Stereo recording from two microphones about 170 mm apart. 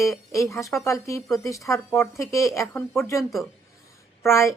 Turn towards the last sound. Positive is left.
turn(degrees=15)  # may be behind; listen again after turning